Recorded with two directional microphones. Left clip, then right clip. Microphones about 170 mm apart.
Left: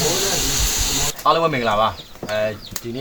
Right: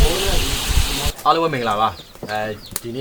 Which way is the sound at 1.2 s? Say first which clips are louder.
Even; 25° right (ahead or behind).